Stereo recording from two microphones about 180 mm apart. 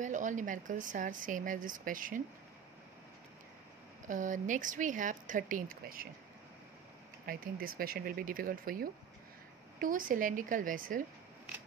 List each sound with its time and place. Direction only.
0.0 s speech: 45° right (ahead or behind)
4.1 s speech: 45° right (ahead or behind)
7.2 s speech: 55° right (ahead or behind)